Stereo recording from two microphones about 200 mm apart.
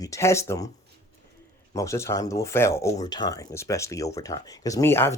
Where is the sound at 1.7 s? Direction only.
15° left (ahead or behind).